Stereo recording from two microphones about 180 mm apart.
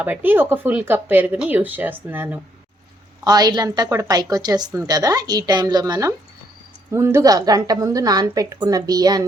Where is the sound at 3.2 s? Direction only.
20° right (ahead or behind).